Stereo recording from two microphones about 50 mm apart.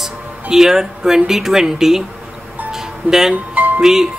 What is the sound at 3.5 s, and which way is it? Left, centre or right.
Music, right.